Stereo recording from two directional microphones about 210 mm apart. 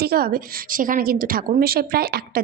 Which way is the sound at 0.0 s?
45° right (ahead or behind).